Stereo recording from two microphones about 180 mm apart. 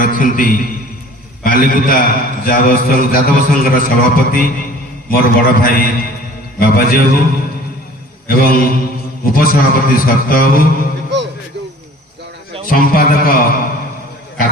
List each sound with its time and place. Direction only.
0.0 s a man's voice: 50° left (ahead or behind)
8.3 s a man's voice: 55° left (ahead or behind)
12.6 s a man's voice: 55° left (ahead or behind)